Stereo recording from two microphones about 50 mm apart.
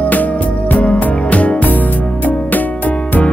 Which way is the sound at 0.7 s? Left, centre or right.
Left.